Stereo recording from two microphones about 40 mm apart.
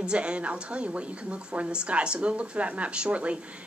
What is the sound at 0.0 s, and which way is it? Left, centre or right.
A woman's voice, right.